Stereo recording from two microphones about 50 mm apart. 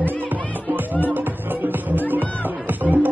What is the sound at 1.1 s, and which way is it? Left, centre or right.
Music, right.